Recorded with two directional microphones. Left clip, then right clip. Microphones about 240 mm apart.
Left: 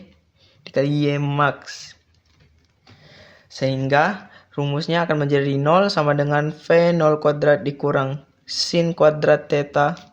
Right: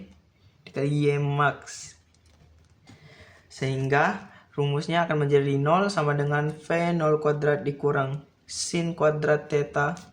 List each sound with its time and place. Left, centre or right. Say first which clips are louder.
0.6 s speech: left 6 dB; left
3.2 s a sound: left 9 dB; left
4.5 s speech: left 4 dB; left